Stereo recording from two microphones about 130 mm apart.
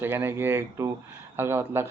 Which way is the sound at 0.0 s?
15° right (ahead or behind).